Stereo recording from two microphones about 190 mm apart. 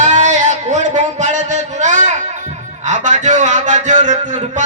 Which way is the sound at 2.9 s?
40° right (ahead or behind).